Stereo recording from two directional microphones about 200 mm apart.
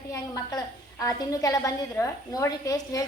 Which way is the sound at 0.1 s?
15° left (ahead or behind).